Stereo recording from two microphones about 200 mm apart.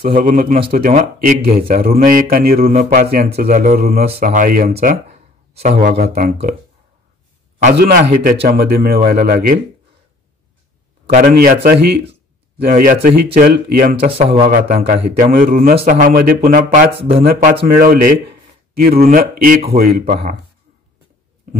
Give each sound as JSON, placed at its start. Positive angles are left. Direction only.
{"t": 0.0, "sound": "speech", "side_deg": -45}
{"t": 2.7, "sound": "speech", "side_deg": -35}
{"t": 3.4, "sound": "a man's voice", "side_deg": -40}
{"t": 7.7, "sound": "speech", "side_deg": -45}
{"t": 11.1, "sound": "speech", "side_deg": -45}
{"t": 14.1, "sound": "a man's voice", "side_deg": -30}
{"t": 14.8, "sound": "speech", "side_deg": -40}